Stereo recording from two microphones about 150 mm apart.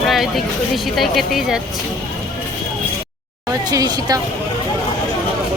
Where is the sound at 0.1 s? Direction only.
Centre (ahead or behind).